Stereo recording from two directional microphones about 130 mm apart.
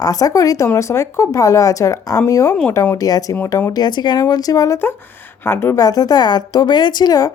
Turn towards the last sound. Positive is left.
turn(degrees=30)  # may be behind; listen again after turning